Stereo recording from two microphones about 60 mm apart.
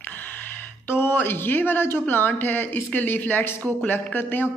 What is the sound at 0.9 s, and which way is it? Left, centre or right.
Speech, left.